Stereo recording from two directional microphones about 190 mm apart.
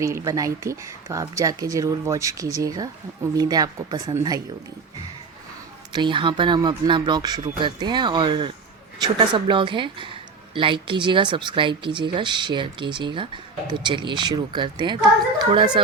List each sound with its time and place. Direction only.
0.0 s a woman's voice: 15° right (ahead or behind)
5.9 s a woman's voice: 25° right (ahead or behind)